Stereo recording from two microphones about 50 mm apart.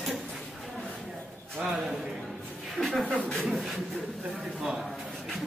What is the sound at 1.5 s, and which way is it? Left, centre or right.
A man's voice, centre.